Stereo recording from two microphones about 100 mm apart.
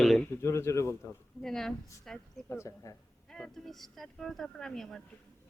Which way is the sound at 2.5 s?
30° left (ahead or behind).